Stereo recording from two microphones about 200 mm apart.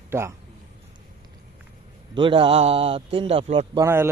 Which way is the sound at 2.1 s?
25° right (ahead or behind).